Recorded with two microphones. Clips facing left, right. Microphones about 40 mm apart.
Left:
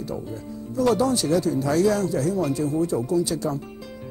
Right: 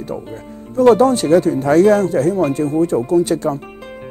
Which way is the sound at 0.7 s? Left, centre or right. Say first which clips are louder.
Right 10 dB; right.